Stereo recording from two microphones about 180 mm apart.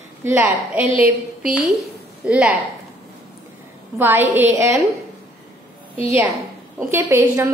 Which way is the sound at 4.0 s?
10° right (ahead or behind).